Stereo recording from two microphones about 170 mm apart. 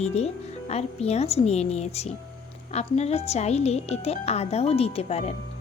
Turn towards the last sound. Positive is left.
turn(degrees=40)  # may be behind; listen again after turning